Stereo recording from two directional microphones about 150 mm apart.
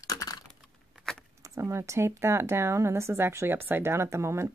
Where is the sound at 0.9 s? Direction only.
5° left (ahead or behind).